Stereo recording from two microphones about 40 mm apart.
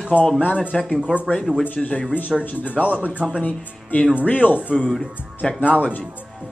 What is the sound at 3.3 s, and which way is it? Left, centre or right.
Speech, left.